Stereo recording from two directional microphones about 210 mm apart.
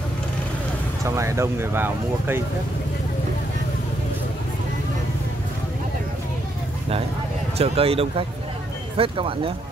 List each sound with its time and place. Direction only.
1.0 s speech: 15° right (ahead or behind)
7.5 s speech: 30° right (ahead or behind)